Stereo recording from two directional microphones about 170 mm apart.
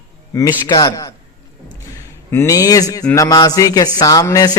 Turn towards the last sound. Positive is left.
turn(degrees=20)  # may be behind; listen again after turning